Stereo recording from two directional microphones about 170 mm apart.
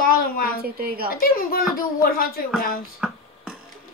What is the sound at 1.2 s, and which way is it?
A woman's voice, 60° left (ahead or behind).